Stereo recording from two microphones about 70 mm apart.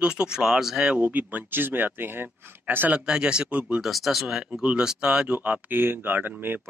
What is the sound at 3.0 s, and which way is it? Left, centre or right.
Speech, centre.